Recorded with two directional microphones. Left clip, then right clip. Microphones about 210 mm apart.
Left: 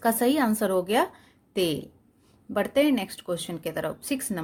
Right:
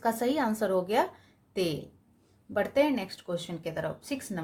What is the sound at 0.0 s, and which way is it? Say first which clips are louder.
A woman's voice: left 4 dB; 35° left (ahead or behind).